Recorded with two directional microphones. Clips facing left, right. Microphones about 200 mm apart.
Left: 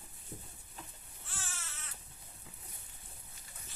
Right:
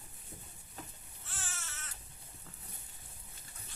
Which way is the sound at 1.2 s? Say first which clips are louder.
Even; centre (ahead or behind).